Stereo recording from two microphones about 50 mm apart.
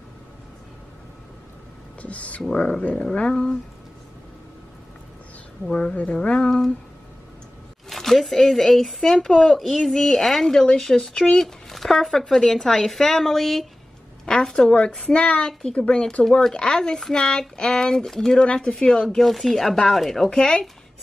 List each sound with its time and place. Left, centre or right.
2.0 s speech: left
5.7 s speech: centre
7.9 s speech: centre
14.2 s speech: centre